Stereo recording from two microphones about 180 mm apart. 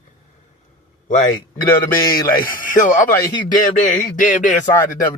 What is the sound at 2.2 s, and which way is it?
Speech, 50° left (ahead or behind).